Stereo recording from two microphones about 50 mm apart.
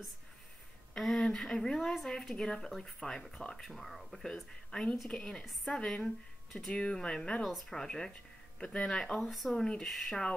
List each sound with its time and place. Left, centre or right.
0.9 s a woman's voice: centre
3.7 s speech: centre
4.3 s a woman's voice: centre
6.7 s a woman's voice: centre